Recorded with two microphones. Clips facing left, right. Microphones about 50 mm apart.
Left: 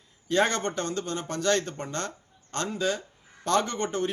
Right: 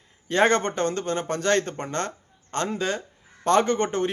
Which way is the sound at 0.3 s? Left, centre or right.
Right.